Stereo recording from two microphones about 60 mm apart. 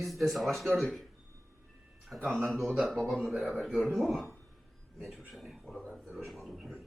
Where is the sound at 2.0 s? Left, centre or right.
Centre.